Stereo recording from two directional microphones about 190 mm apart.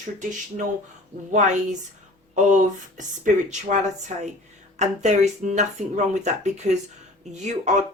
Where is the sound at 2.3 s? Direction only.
40° right (ahead or behind).